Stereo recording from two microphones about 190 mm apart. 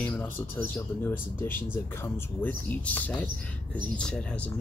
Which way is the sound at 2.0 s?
10° left (ahead or behind).